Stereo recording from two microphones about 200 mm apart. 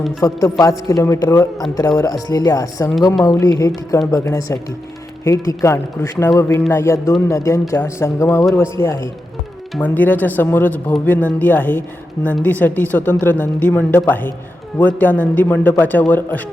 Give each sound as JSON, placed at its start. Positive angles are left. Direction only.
{"t": 0.2, "sound": "speech", "side_deg": 20}